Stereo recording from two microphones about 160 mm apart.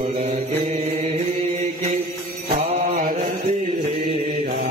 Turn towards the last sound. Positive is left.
turn(degrees=-50)  # may be behind; listen again after turning